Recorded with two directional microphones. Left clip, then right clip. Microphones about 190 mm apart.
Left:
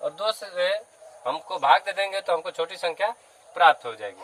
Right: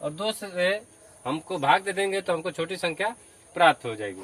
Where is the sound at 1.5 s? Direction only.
15° left (ahead or behind).